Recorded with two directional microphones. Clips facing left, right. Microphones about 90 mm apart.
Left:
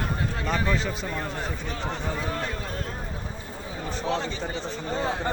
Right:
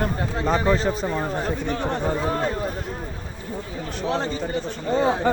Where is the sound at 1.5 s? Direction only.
60° right (ahead or behind).